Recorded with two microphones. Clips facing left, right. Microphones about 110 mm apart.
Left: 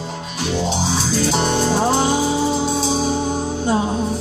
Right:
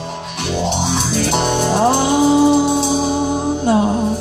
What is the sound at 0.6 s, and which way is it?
Music, 60° right (ahead or behind).